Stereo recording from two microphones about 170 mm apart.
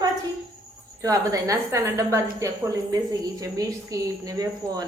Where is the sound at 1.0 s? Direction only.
20° right (ahead or behind).